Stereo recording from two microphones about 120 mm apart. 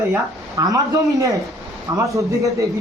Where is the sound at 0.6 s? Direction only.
30° right (ahead or behind).